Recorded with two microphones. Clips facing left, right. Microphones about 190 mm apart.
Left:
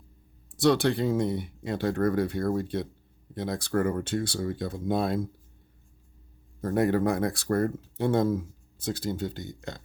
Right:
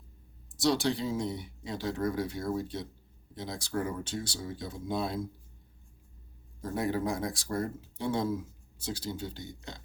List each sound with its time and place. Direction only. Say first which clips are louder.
0.5 s speech: left 5 dB; 60° left (ahead or behind)
6.6 s speech: left 7 dB; 60° left (ahead or behind)